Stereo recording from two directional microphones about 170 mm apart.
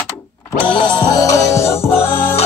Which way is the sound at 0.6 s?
30° left (ahead or behind).